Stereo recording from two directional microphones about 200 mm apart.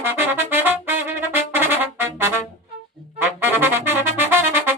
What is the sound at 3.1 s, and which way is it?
Trumpet, 10° right (ahead or behind).